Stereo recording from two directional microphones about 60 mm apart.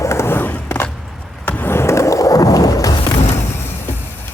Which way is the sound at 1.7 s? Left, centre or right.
Left.